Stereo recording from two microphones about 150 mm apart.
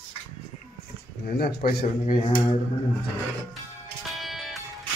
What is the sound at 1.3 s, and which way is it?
Speech, 90° left.